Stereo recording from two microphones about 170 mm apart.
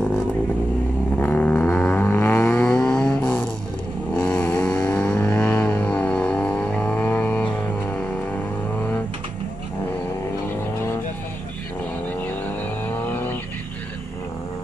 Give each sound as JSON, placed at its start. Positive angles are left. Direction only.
{"t": 1.1, "sound": "vehicle", "side_deg": 10}
{"t": 4.1, "sound": "a sound", "side_deg": 10}
{"t": 12.2, "sound": "vehicle", "side_deg": 10}